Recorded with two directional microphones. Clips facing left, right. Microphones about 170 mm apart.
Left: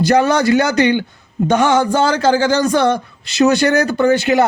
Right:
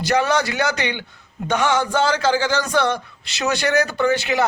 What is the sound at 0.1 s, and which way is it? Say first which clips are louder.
A man's voice: left 5 dB; 45° left (ahead or behind).